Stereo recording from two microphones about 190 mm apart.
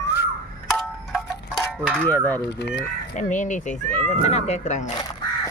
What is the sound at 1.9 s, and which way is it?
Speech, 10° left (ahead or behind).